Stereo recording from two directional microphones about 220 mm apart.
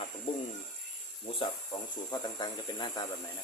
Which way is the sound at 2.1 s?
20° left (ahead or behind).